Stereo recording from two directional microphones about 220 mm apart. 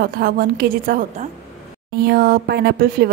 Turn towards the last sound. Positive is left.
turn(degrees=-45)  # may be behind; listen again after turning